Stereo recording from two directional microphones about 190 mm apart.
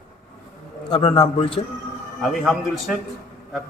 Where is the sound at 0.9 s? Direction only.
30° left (ahead or behind).